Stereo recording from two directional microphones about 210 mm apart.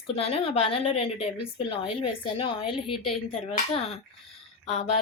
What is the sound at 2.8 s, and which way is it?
Speech, centre (ahead or behind).